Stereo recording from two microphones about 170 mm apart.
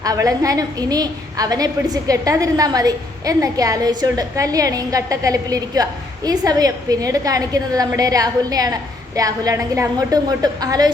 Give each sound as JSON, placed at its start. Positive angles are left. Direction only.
{"t": 0.0, "sound": "a woman's voice", "side_deg": -20}